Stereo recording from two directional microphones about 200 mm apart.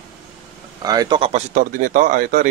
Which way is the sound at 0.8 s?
20° right (ahead or behind).